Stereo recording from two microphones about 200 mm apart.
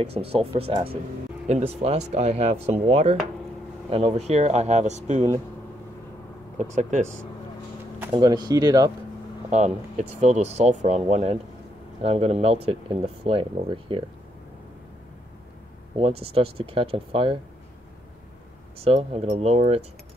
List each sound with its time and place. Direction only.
0.3 s speech: 30° right (ahead or behind)
6.6 s speech: 35° right (ahead or behind)
8.1 s speech: 20° right (ahead or behind)
9.5 s speech: 35° right (ahead or behind)
16.0 s speech: 30° right (ahead or behind)
18.8 s speech: 30° right (ahead or behind)